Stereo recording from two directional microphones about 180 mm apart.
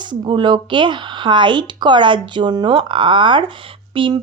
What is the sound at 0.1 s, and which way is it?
Speech, 25° right (ahead or behind).